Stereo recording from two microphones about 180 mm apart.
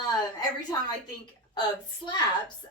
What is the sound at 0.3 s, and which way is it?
A woman's voice, 25° left (ahead or behind).